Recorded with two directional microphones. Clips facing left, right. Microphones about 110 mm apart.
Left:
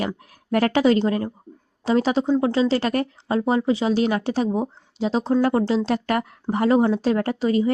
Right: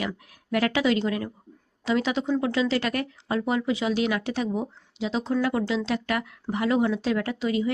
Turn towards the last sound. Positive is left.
turn(degrees=40)  # may be behind; listen again after turning